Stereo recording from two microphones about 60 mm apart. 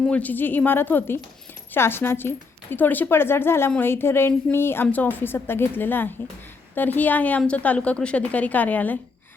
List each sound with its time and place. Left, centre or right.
0.1 s a woman's voice: left
4.9 s a woman's voice: left